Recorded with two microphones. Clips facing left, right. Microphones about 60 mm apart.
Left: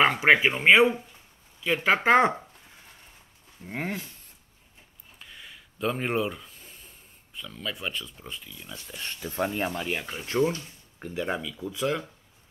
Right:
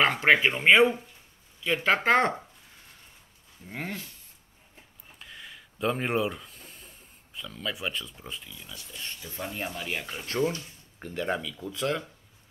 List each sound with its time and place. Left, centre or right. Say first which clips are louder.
0.0 s speech: left 2 dB; centre
3.6 s speech: left 4 dB; centre
5.2 s a sound: right 1 dB; centre
7.3 s speech: right 1 dB; centre
8.9 s speech: left 5 dB; left
9.4 s speech: left 7 dB; left
10.2 s speech: left 3 dB; centre
11.0 s speech: even; centre